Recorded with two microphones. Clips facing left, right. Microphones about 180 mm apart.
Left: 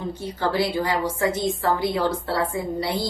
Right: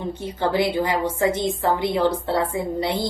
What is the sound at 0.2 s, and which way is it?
A woman's voice, 20° right (ahead or behind).